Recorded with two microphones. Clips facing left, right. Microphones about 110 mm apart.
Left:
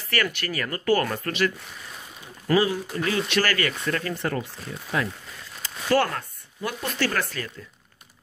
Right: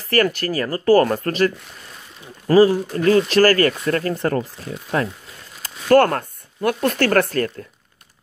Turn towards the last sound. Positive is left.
turn(degrees=-55)  # may be behind; listen again after turning